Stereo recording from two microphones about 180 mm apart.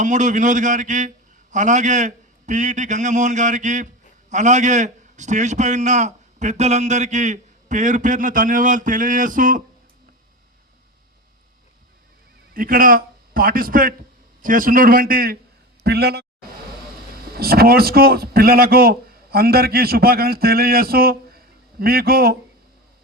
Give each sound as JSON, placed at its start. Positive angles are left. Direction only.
{"t": 0.0, "sound": "a man's voice", "side_deg": -45}
{"t": 12.5, "sound": "a man's voice", "side_deg": -50}